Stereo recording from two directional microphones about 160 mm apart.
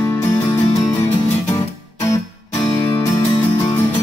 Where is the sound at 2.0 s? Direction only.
20° left (ahead or behind).